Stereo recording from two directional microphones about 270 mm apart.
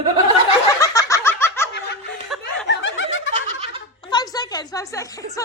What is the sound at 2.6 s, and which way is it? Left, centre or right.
Snicker, left.